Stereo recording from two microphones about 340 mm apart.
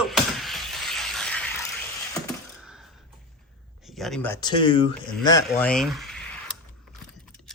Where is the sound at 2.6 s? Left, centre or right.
Centre.